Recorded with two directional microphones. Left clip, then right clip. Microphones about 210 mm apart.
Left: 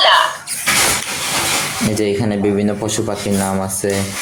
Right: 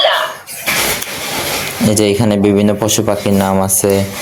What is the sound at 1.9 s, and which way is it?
Speech, 40° right (ahead or behind).